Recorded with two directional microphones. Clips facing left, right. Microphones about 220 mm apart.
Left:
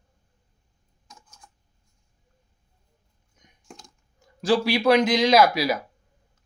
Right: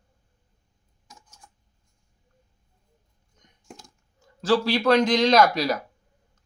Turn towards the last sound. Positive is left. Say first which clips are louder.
# left 1 dB
turn(degrees=10)  # may be behind; listen again after turning